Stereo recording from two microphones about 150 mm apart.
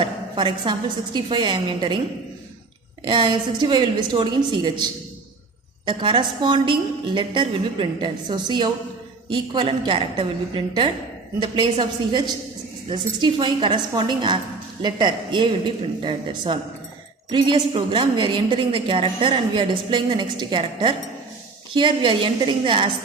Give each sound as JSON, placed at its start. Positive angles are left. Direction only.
{"t": 0.0, "sound": "a woman's voice", "side_deg": -35}
{"t": 3.0, "sound": "a woman's voice", "side_deg": -30}